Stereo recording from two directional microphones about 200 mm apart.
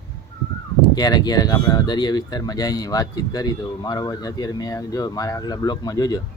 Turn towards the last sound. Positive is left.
turn(degrees=20)  # may be behind; listen again after turning